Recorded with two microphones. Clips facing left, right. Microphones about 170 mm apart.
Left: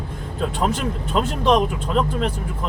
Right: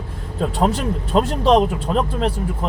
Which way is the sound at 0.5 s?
35° right (ahead or behind).